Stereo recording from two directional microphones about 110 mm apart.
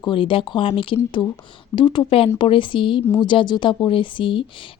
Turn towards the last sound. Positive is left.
turn(degrees=50)  # may be behind; listen again after turning